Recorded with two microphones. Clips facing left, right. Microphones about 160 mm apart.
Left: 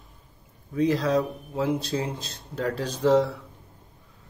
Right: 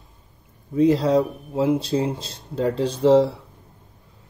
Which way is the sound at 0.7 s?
25° right (ahead or behind).